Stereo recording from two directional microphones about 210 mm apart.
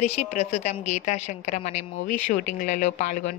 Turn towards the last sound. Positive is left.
turn(degrees=35)  # may be behind; listen again after turning